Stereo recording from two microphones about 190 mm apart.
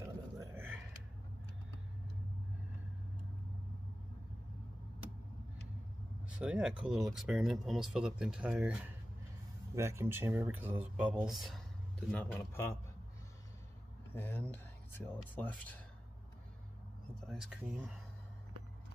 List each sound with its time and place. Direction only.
0.0 s a sound: 15° right (ahead or behind)
6.3 s speech: 5° right (ahead or behind); by 12.7 s 15° left (ahead or behind)
14.1 s speech: 10° left (ahead or behind)
17.3 s speech: centre (ahead or behind)